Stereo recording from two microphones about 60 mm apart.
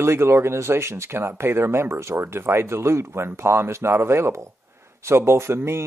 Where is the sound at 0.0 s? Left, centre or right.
Right.